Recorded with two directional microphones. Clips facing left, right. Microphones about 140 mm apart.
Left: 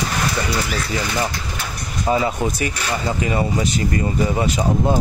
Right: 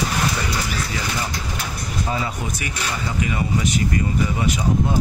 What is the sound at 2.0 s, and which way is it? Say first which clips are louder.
Speech: left 9 dB; 30° left (ahead or behind).